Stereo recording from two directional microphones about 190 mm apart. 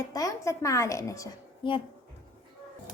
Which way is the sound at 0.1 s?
20° left (ahead or behind).